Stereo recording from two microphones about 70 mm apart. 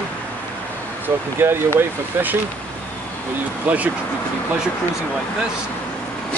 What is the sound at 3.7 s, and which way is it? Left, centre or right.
Speech, centre.